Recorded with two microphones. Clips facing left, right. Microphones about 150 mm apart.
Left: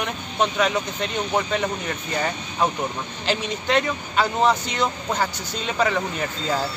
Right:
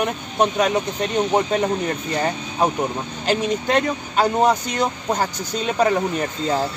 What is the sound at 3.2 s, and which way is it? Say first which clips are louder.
Speech: right 5 dB; 45° right (ahead or behind).